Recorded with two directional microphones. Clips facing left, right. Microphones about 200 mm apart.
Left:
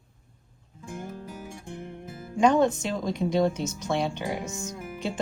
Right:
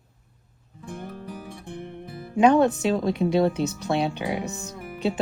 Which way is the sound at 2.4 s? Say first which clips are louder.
Right 3 dB; 65° right (ahead or behind).